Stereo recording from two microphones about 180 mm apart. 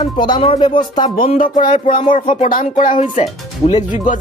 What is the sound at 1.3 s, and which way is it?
Speech, 50° left (ahead or behind).